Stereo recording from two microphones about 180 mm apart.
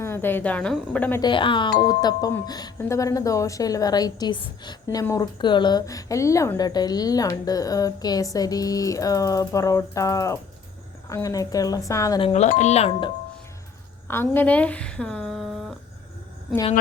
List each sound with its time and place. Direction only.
0.0 s a woman's voice: 10° left (ahead or behind)
1.2 s a woman's voice: 25° left (ahead or behind)
12.2 s speech: 35° left (ahead or behind)
14.1 s a woman's voice: 10° left (ahead or behind)